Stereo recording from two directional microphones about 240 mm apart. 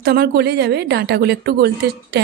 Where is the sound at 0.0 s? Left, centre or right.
Right.